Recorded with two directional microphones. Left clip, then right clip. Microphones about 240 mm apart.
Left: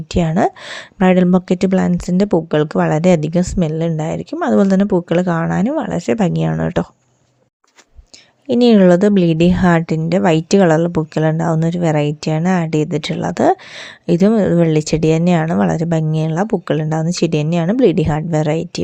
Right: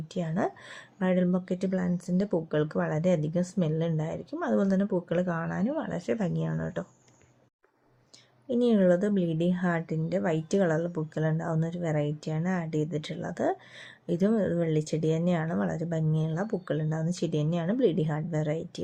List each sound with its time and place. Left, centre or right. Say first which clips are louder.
0.1 s a woman's voice: left 15 dB; left
8.4 s a woman's voice: left 13 dB; left